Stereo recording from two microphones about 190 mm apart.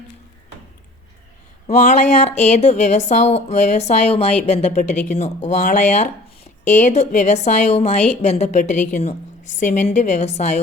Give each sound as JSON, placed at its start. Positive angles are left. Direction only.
{"t": 1.6, "sound": "a woman's voice", "side_deg": 35}